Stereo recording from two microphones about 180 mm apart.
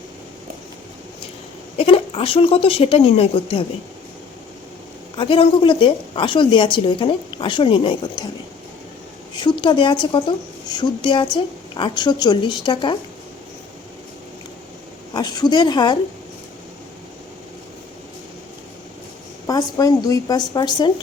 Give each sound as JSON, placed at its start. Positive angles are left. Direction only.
{"t": 1.8, "sound": "speech", "side_deg": 30}
{"t": 5.1, "sound": "a woman's voice", "side_deg": 30}
{"t": 9.3, "sound": "a woman's voice", "side_deg": 25}
{"t": 15.1, "sound": "a woman's voice", "side_deg": 20}
{"t": 19.5, "sound": "a woman's voice", "side_deg": 20}